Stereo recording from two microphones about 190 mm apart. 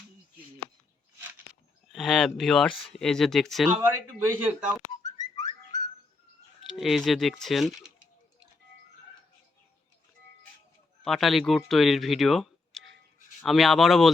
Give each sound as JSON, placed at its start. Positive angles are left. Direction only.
{"t": 1.9, "sound": "speech", "side_deg": 0}
{"t": 3.8, "sound": "speech", "side_deg": -10}
{"t": 4.9, "sound": "whistling", "side_deg": 20}
{"t": 6.7, "sound": "speech", "side_deg": 0}
{"t": 11.0, "sound": "speech", "side_deg": 0}